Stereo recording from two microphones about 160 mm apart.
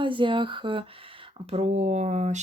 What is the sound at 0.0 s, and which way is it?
Speech, 30° right (ahead or behind).